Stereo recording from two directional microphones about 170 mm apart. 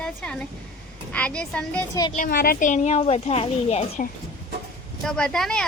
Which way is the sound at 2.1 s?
55° left (ahead or behind).